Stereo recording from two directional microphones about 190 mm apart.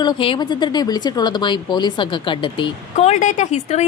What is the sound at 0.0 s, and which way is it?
A woman's voice, 25° left (ahead or behind).